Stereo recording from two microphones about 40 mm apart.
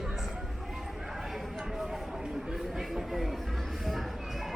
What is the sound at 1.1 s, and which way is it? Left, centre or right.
Clip-clop, centre.